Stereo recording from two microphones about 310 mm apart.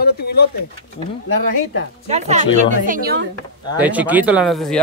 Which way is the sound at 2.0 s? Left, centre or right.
Right.